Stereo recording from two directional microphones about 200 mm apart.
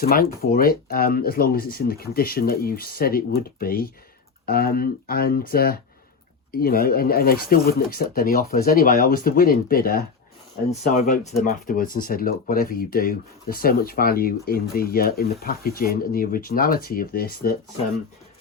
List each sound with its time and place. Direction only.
0.0 s speech: 50° left (ahead or behind)